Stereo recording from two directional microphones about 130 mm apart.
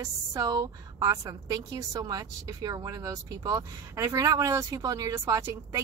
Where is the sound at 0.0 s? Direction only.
25° right (ahead or behind).